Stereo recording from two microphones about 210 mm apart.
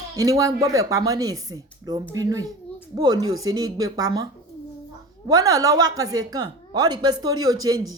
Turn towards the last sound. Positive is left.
turn(degrees=-20)  # may be behind; listen again after turning